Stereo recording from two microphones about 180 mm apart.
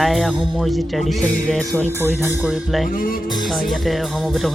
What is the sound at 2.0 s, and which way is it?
Speech, 10° right (ahead or behind).